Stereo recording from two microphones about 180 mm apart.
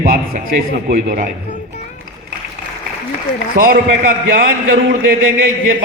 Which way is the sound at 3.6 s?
55° right (ahead or behind).